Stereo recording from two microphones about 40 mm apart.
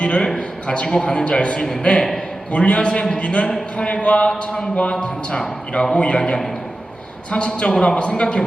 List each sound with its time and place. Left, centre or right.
0.0 s a man's voice: left